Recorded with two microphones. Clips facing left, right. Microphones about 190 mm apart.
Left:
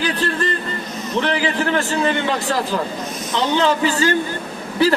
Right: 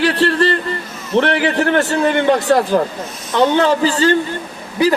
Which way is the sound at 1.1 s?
60° right (ahead or behind).